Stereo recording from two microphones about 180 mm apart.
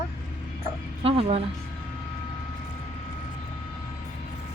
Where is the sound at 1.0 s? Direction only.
30° right (ahead or behind).